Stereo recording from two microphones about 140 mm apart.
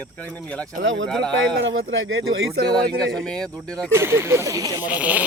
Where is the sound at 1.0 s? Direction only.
5° left (ahead or behind).